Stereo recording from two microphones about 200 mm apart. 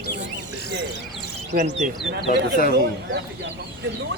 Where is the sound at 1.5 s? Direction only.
35° right (ahead or behind).